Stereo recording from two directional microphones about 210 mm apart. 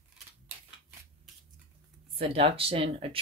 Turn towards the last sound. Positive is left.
turn(degrees=-25)  # may be behind; listen again after turning